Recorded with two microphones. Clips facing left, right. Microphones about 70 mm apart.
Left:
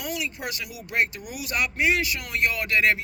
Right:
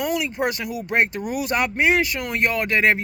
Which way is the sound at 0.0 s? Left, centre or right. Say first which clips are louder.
Right 8 dB; right.